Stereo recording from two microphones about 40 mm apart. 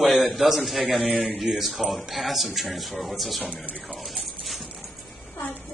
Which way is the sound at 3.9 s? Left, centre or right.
Centre.